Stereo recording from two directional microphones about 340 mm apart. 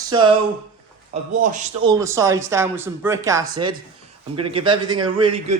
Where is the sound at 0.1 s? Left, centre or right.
Centre.